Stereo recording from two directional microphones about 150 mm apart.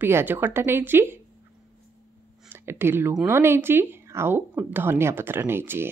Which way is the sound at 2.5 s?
15° right (ahead or behind).